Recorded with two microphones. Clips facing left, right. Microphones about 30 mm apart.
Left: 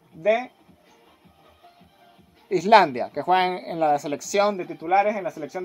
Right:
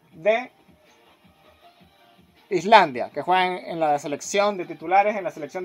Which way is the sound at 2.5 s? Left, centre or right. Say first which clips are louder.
Even; centre.